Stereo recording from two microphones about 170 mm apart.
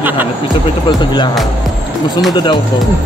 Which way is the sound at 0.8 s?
25° left (ahead or behind).